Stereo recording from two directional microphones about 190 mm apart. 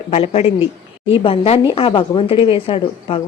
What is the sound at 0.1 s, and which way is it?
Speech, 30° left (ahead or behind).